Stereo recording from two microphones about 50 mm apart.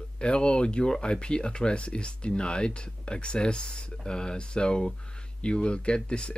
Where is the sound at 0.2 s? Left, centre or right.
Centre.